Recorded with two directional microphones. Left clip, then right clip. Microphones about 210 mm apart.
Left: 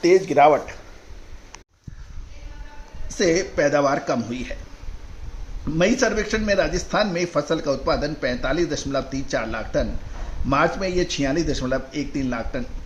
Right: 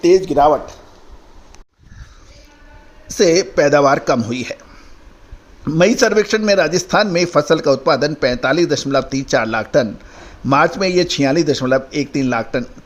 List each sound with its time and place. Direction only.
0.0 s speech: 40° right (ahead or behind)
3.1 s a man's voice: 45° right (ahead or behind)
5.6 s a man's voice: 40° right (ahead or behind)